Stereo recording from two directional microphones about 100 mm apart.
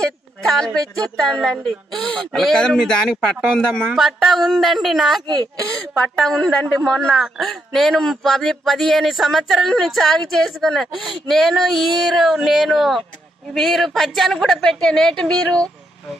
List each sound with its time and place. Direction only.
0.0 s a woman's voice: 5° left (ahead or behind)
5.2 s speech: 45° right (ahead or behind)
5.9 s a woman's voice: 5° left (ahead or behind)